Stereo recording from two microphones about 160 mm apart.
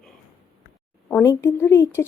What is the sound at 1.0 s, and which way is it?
Speech, 15° left (ahead or behind).